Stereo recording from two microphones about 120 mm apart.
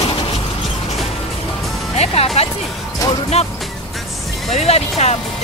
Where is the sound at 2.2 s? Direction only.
55° left (ahead or behind).